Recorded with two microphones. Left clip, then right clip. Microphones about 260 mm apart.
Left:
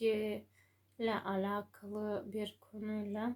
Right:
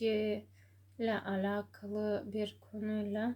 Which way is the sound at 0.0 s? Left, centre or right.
Left.